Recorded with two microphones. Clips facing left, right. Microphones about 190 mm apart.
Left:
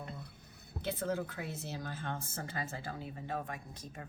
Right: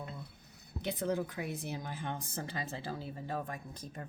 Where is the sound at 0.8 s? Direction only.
15° right (ahead or behind).